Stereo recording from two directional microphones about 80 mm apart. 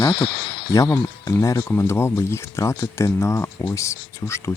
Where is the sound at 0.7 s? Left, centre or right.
Left.